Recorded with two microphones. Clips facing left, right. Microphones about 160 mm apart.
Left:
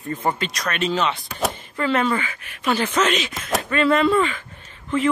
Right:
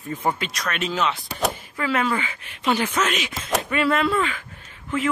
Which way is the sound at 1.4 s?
5° right (ahead or behind).